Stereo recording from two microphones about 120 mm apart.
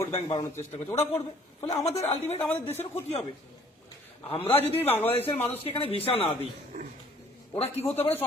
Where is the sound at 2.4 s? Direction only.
15° left (ahead or behind).